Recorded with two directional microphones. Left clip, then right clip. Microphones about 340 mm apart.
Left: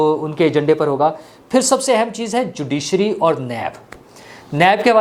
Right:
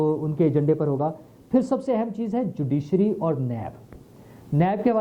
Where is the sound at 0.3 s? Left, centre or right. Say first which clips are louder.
Left 7 dB; centre.